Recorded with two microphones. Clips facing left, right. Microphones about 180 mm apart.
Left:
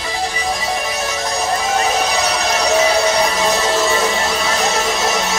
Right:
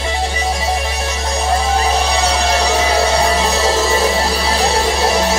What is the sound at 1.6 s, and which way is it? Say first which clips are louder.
Music: right 1 dB; 30° right (ahead or behind).